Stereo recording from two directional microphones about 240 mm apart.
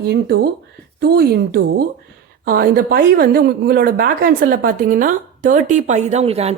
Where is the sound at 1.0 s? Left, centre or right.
Right.